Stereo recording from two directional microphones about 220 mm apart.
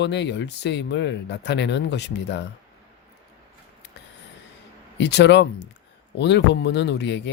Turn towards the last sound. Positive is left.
turn(degrees=50)  # may be behind; listen again after turning